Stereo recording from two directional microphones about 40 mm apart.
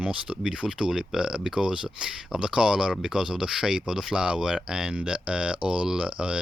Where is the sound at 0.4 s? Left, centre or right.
Centre.